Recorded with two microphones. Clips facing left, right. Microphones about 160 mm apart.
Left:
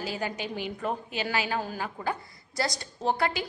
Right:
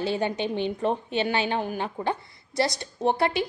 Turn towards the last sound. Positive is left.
turn(degrees=-25)  # may be behind; listen again after turning